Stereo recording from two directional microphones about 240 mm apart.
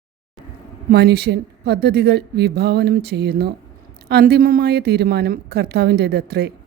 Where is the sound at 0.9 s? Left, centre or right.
Right.